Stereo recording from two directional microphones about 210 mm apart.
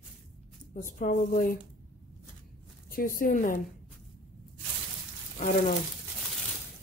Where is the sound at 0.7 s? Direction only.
40° left (ahead or behind).